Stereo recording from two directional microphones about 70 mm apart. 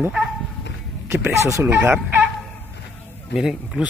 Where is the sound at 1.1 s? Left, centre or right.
Right.